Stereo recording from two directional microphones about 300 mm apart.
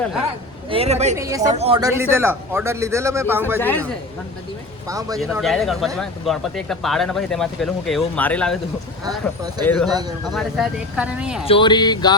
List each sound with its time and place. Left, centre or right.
0.7 s speech: centre
1.1 s speech: centre
3.6 s speech: centre
4.9 s speech: centre
5.1 s speech: centre
9.0 s speech: centre
9.6 s speech: centre
9.9 s speech: centre
10.3 s speech: centre
11.4 s speech: centre